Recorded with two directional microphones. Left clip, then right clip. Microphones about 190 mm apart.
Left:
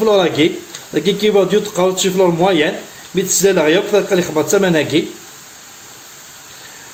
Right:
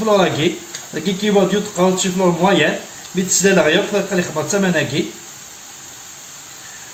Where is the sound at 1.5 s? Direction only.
55° left (ahead or behind).